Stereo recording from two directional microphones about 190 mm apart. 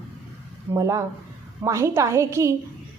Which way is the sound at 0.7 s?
15° right (ahead or behind).